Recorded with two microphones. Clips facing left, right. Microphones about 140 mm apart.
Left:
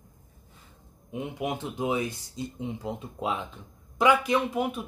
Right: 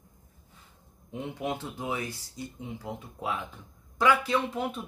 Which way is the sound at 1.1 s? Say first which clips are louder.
Left 2 dB; 15° left (ahead or behind).